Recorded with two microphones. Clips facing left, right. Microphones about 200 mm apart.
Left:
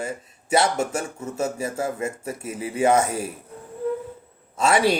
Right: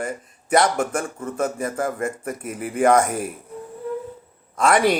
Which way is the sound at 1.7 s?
50° right (ahead or behind).